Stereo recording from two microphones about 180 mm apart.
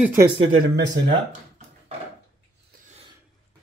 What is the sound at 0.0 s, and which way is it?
Speech, 10° right (ahead or behind).